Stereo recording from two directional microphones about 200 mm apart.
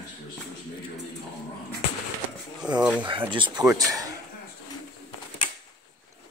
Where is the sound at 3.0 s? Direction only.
25° right (ahead or behind).